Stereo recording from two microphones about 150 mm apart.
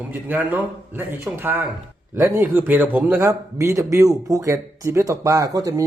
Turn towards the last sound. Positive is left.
turn(degrees=-25)  # may be behind; listen again after turning